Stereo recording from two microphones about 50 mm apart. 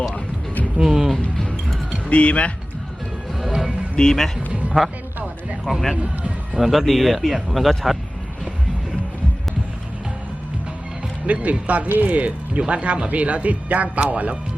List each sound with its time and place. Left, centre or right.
0.8 s speech: centre
2.0 s speech: left
3.5 s music: centre
3.9 s speech: centre
4.6 s music: right
6.5 s speech: centre
11.3 s speech: right